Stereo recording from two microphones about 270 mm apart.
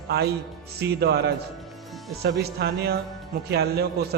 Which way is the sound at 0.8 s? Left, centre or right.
Right.